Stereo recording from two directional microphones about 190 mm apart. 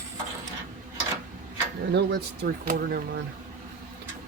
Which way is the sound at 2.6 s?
50° right (ahead or behind).